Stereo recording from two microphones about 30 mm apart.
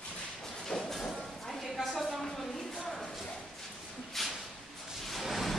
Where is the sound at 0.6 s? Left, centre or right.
Centre.